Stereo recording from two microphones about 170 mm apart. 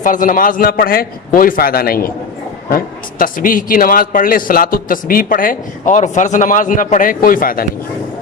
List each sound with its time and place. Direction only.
0.0 s a man's voice: 50° left (ahead or behind)